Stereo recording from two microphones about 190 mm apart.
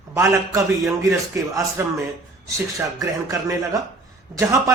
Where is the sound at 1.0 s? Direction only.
15° right (ahead or behind).